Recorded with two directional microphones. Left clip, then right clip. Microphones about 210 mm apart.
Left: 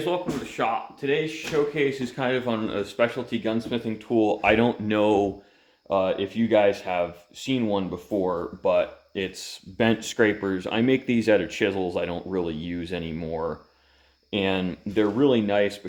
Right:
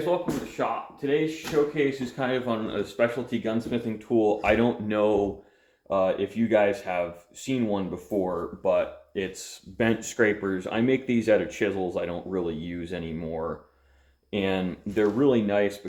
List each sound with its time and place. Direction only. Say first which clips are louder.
0.5 s speech: left 5 dB; 40° left (ahead or behind)
1.7 s speech: left 1 dB; 55° left (ahead or behind); by 15.7 s 35° left (ahead or behind)